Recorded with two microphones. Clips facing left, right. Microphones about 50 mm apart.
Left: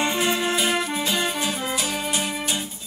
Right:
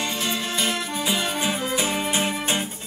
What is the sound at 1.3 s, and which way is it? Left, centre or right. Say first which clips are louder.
Music: right 1 dB; centre.